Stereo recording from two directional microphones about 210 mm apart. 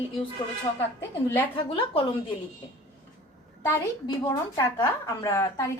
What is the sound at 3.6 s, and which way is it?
A woman's voice, 15° left (ahead or behind).